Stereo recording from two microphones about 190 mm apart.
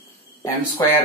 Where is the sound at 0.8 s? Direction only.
15° left (ahead or behind).